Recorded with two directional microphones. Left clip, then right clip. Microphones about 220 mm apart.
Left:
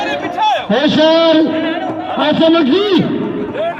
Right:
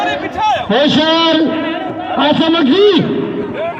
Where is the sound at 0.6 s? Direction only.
30° right (ahead or behind).